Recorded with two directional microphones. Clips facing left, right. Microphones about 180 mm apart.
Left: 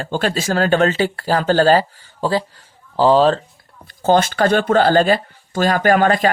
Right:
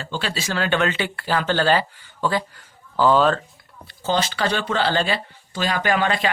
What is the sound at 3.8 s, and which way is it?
Speech, 50° left (ahead or behind).